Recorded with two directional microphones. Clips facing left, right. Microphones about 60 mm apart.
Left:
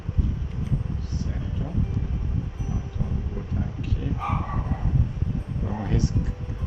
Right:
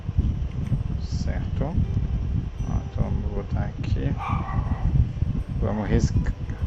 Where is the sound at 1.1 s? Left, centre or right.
Right.